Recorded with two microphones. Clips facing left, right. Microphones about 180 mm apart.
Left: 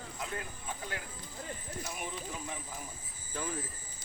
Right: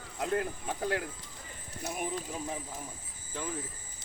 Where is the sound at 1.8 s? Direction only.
50° right (ahead or behind).